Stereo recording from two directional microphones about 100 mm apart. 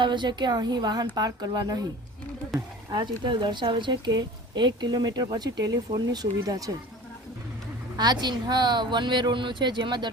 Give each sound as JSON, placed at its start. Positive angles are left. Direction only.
{"t": 0.0, "sound": "a woman's voice", "side_deg": -50}
{"t": 2.9, "sound": "a woman's voice", "side_deg": -50}
{"t": 7.9, "sound": "a woman's voice", "side_deg": -45}